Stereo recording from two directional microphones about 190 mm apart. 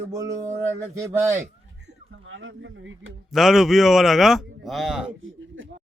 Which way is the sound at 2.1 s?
90° right.